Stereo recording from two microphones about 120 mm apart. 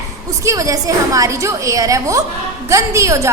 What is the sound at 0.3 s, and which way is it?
A woman's voice, 25° right (ahead or behind).